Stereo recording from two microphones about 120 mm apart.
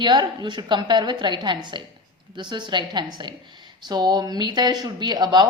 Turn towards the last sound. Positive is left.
turn(degrees=-35)  # may be behind; listen again after turning